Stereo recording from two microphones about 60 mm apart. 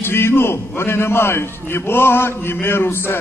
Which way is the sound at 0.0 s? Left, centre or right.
Left.